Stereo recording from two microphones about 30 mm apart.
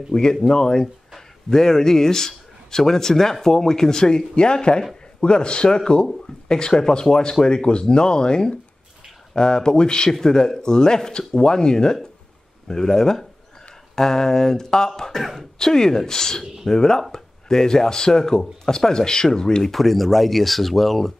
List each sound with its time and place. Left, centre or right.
0.1 s speech: left
15.1 s speech: centre
15.6 s speech: left
19.6 s speech: centre